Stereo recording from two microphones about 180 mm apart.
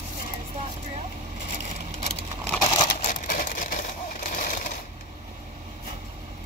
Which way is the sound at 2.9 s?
50° left (ahead or behind).